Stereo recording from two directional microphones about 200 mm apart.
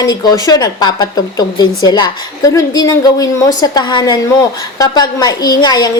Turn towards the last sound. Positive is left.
turn(degrees=20)  # may be behind; listen again after turning